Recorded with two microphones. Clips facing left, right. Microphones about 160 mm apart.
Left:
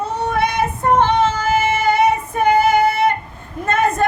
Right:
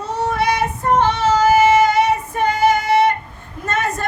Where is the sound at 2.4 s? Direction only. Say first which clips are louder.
Left 2 dB; 55° left (ahead or behind).